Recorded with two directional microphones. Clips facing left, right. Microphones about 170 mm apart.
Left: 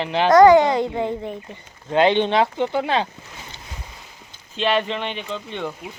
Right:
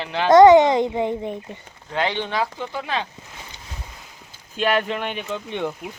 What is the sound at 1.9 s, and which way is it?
Speech, 20° left (ahead or behind).